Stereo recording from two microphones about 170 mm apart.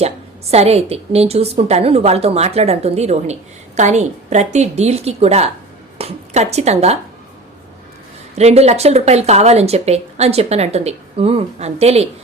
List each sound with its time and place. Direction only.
0.5 s speech: 40° right (ahead or behind)
8.4 s speech: 40° right (ahead or behind)